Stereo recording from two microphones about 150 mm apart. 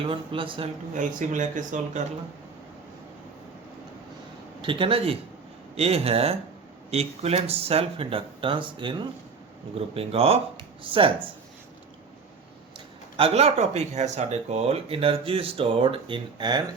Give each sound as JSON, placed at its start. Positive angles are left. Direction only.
{"t": 0.0, "sound": "speech", "side_deg": -35}
{"t": 0.9, "sound": "speech", "side_deg": -55}
{"t": 4.6, "sound": "speech", "side_deg": -35}
{"t": 13.1, "sound": "speech", "side_deg": -40}